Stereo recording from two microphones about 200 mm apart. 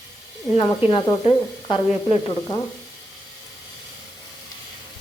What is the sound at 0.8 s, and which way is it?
A woman's voice, 25° left (ahead or behind).